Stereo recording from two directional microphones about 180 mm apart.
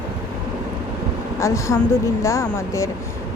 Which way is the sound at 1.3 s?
15° left (ahead or behind).